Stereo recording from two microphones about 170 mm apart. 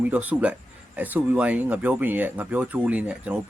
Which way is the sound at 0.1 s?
10° right (ahead or behind).